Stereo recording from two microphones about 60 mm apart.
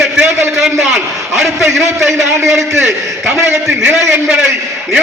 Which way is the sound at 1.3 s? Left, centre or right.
Right.